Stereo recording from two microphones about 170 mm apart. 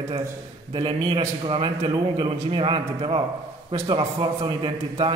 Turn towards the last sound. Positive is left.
turn(degrees=-30)  # may be behind; listen again after turning